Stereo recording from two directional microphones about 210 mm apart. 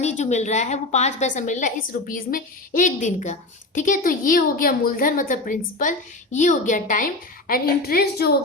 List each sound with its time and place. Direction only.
0.0 s a woman's voice: 35° left (ahead or behind)